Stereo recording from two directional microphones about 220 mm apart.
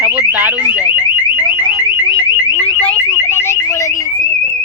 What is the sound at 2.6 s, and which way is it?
Alarm, 5° left (ahead or behind).